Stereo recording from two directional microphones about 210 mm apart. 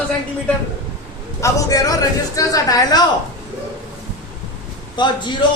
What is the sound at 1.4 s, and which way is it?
Speech, 15° left (ahead or behind).